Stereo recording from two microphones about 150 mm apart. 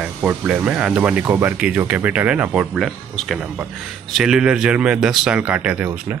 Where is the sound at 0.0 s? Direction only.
10° right (ahead or behind).